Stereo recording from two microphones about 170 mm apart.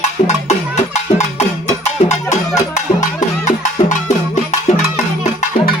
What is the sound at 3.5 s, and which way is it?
Music, 45° left (ahead or behind).